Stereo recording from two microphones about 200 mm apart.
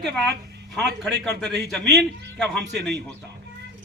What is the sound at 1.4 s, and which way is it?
Speech, centre (ahead or behind).